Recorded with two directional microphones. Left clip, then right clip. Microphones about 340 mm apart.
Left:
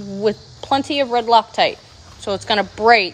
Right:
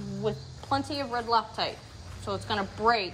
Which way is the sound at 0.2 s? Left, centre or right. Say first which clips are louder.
Left 13 dB; left.